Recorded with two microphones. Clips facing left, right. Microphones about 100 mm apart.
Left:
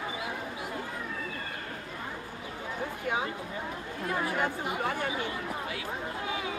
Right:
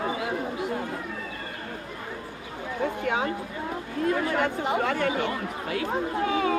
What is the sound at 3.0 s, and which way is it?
Speech, 65° right (ahead or behind).